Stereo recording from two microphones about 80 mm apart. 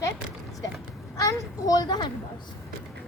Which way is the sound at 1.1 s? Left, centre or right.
Left.